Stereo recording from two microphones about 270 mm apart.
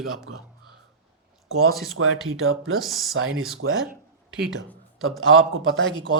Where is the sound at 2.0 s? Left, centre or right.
Right.